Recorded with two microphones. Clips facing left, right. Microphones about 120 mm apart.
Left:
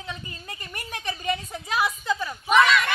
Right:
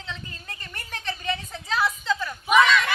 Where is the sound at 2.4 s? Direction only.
Centre (ahead or behind).